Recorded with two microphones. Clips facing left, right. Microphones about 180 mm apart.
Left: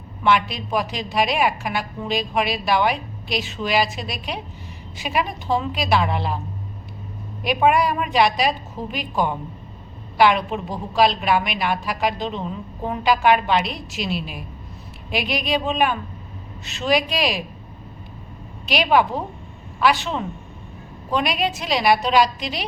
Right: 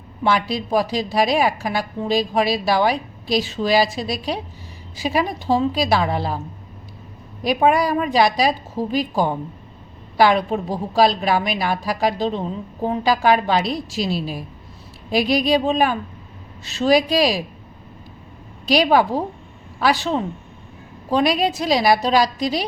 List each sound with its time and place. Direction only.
0.3 s a woman's voice: 35° right (ahead or behind)
7.4 s a woman's voice: 35° right (ahead or behind)
18.6 s a woman's voice: 40° right (ahead or behind)